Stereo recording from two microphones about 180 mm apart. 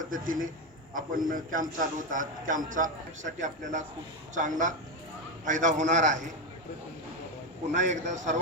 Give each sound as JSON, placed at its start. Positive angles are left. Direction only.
{"t": 0.0, "sound": "a man's voice", "side_deg": -50}
{"t": 7.7, "sound": "a man's voice", "side_deg": -45}